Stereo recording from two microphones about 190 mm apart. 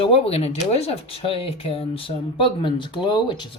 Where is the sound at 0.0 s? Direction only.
30° left (ahead or behind).